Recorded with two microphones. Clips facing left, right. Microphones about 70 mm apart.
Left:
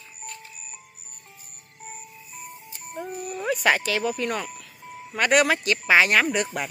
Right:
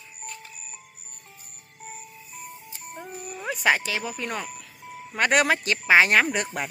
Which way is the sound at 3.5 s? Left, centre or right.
Centre.